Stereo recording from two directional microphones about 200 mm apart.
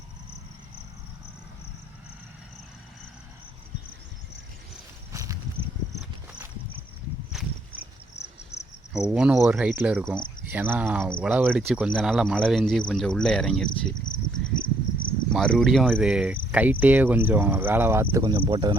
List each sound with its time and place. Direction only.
5.1 s a sound: 15° right (ahead or behind)
8.5 s cricket: 35° left (ahead or behind)
9.0 s cricket: 5° right (ahead or behind)
10.4 s speech: 10° right (ahead or behind)
10.9 s cricket: centre (ahead or behind)
14.6 s cricket: 45° left (ahead or behind)
15.3 s cricket: centre (ahead or behind)
16.5 s speech: 10° right (ahead or behind)
18.2 s speech: 25° right (ahead or behind)